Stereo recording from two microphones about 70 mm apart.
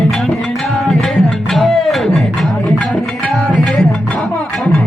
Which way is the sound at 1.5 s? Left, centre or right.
Centre.